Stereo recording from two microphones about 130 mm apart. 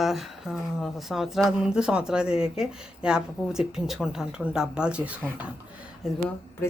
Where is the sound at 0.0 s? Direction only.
Centre (ahead or behind).